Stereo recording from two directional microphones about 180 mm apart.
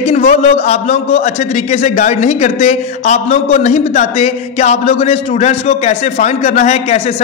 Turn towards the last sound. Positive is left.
turn(degrees=35)  # may be behind; listen again after turning